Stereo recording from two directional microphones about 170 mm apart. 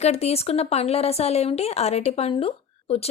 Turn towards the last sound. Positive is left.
turn(degrees=35)  # may be behind; listen again after turning